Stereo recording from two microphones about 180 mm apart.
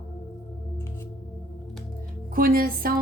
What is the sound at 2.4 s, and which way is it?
Speech, 55° right (ahead or behind).